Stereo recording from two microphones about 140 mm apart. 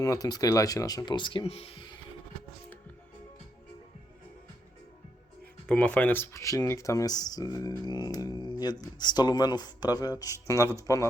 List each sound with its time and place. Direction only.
0.0 s speech: 25° left (ahead or behind)
5.6 s speech: 5° left (ahead or behind); by 11.1 s 25° left (ahead or behind)